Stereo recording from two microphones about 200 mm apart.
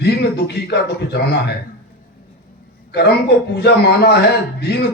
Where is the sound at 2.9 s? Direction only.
55° left (ahead or behind).